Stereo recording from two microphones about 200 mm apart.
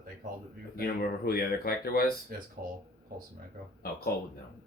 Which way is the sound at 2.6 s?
45° right (ahead or behind).